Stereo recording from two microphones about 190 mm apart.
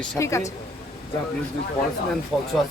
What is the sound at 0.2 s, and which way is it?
Speech, 15° left (ahead or behind).